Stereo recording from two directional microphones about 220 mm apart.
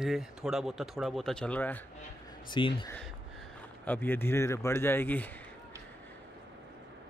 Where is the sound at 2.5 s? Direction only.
20° left (ahead or behind).